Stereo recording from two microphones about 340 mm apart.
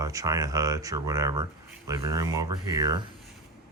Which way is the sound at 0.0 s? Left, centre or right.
Centre.